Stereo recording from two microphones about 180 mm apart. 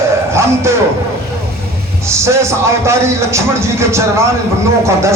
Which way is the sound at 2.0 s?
15° right (ahead or behind).